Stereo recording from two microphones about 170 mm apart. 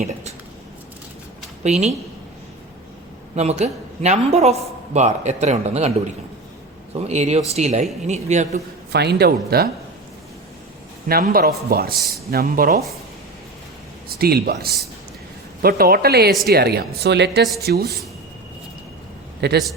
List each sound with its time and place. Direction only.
1.6 s speech: 40° right (ahead or behind)
3.3 s speech: 40° right (ahead or behind)
6.9 s a man's voice: 40° right (ahead or behind)
8.9 s a woman's voice: 75° right (ahead or behind)
11.1 s speech: 60° right (ahead or behind)
14.1 s a woman's voice: 65° right (ahead or behind); by 17.4 s 80° right
17.6 s a woman's voice: 70° right (ahead or behind)
19.4 s a woman's voice: 75° right (ahead or behind)